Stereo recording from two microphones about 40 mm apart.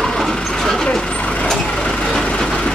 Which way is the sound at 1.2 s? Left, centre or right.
Left.